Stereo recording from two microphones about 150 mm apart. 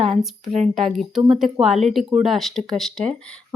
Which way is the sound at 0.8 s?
Centre (ahead or behind).